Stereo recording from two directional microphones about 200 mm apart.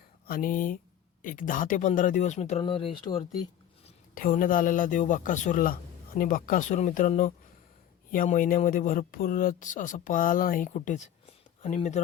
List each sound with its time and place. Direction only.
0.3 s a man's voice: 45° left (ahead or behind); by 3.2 s 25° left (ahead or behind)
4.1 s a man's voice: 45° left (ahead or behind)